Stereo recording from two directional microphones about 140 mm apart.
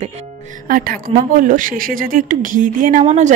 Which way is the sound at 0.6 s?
85° right.